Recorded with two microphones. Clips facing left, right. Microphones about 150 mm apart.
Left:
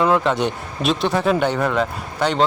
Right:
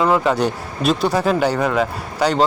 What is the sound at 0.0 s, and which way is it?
Speech, 5° right (ahead or behind).